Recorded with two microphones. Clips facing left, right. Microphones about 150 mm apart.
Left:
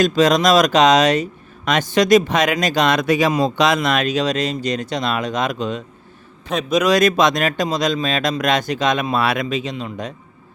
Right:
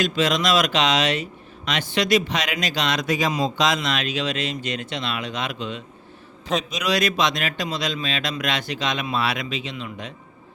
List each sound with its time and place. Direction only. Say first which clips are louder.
0.0 s speech: left 7 dB; 40° left (ahead or behind)